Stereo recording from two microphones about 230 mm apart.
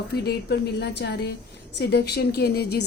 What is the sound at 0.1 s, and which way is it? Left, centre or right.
A woman's voice, left.